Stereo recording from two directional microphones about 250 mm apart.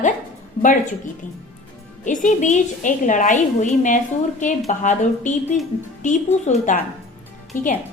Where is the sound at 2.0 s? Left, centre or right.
Left.